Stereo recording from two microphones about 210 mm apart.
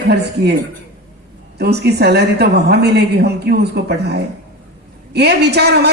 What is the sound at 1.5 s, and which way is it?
A woman's voice, 50° right (ahead or behind).